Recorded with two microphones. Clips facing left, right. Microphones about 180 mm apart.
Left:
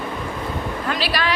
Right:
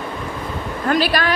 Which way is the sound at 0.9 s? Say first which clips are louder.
Right 7 dB; 50° right (ahead or behind).